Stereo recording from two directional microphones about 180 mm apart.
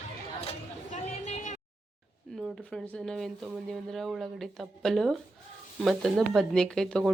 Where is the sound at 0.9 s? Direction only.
40° left (ahead or behind).